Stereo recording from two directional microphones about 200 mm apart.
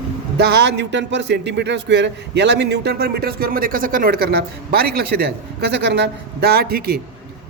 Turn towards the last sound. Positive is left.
turn(degrees=-50)  # may be behind; listen again after turning